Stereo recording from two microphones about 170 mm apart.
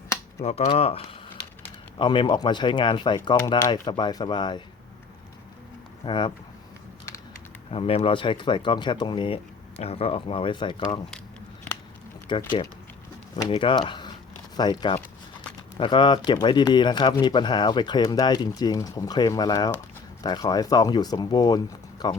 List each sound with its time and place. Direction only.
0.4 s speech: 35° left (ahead or behind)
6.1 s speech: 30° left (ahead or behind)
7.7 s speech: 35° left (ahead or behind)
12.3 s speech: 25° left (ahead or behind)
13.5 s speech: 30° left (ahead or behind)